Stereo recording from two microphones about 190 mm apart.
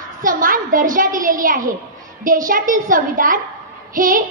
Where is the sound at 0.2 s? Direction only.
45° right (ahead or behind).